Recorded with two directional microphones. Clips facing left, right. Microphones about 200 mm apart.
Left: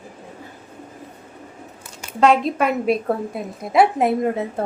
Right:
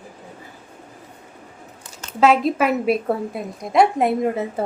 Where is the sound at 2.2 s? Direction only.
Centre (ahead or behind).